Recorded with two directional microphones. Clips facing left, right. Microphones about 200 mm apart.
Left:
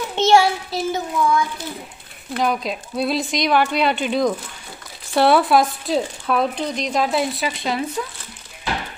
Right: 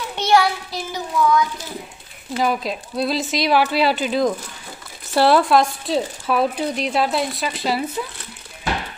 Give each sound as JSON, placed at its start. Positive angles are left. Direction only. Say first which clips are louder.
{"t": 0.1, "sound": "a child's voice", "louder": "left 2 dB", "side_deg": 25}
{"t": 2.3, "sound": "speech", "louder": "even", "side_deg": 0}